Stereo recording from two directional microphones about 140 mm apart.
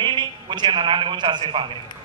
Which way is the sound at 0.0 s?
35° right (ahead or behind).